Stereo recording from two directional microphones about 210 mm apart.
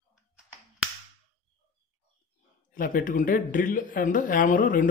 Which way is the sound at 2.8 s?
40° left (ahead or behind).